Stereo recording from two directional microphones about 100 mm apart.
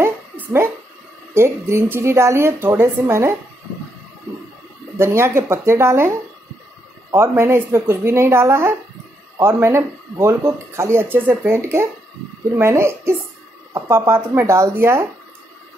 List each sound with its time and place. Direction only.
0.0 s a sound: 20° right (ahead or behind)
1.3 s speech: 25° right (ahead or behind)
4.9 s speech: 25° right (ahead or behind)
7.2 s speech: 25° right (ahead or behind)